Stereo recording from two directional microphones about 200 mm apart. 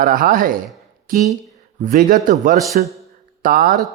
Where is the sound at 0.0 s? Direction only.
45° right (ahead or behind).